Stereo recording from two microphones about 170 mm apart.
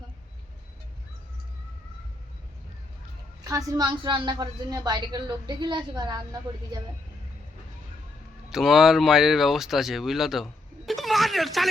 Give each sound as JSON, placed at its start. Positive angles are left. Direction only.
{"t": 3.4, "sound": "a woman's voice", "side_deg": -20}
{"t": 8.4, "sound": "speech", "side_deg": 0}